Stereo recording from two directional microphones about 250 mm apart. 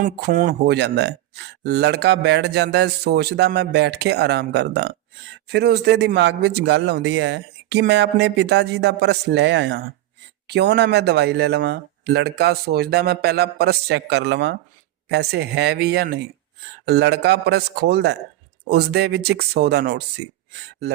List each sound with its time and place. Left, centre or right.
0.0 s speech: right